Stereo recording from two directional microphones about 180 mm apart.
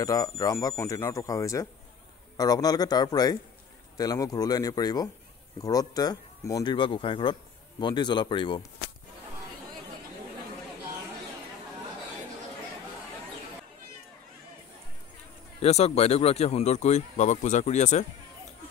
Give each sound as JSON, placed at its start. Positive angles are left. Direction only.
{"t": 0.0, "sound": "speech", "side_deg": 20}
{"t": 15.6, "sound": "speech", "side_deg": 35}